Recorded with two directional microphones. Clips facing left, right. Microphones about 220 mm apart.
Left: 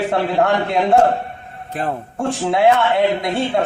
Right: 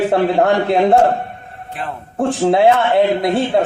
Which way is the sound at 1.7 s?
45° left (ahead or behind).